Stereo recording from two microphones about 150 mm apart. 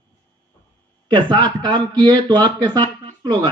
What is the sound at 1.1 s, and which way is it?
A man's voice, 30° right (ahead or behind).